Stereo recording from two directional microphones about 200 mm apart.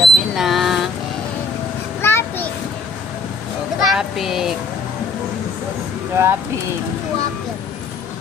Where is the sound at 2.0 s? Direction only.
10° left (ahead or behind).